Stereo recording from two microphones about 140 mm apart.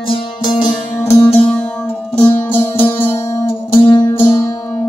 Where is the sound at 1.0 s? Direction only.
15° left (ahead or behind).